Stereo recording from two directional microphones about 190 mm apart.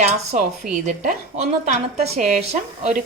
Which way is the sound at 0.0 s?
35° right (ahead or behind).